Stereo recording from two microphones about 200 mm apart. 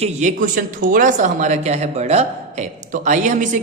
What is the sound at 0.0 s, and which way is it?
Speech, 35° right (ahead or behind).